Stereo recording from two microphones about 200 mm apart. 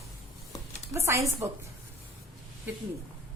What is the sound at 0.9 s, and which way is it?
Speech, 15° right (ahead or behind).